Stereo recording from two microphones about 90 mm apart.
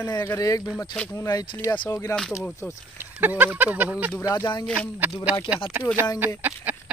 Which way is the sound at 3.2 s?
20° right (ahead or behind).